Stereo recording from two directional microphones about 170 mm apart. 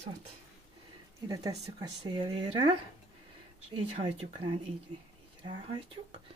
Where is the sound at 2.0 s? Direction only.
30° right (ahead or behind).